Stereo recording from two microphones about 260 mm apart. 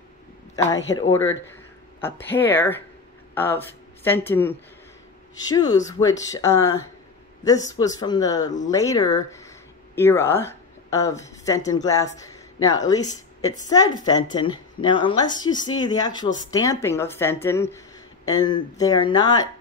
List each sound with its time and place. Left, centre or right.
2.0 s speech: centre